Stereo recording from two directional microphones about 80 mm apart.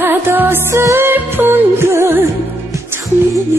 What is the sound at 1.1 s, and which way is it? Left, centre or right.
Music, right.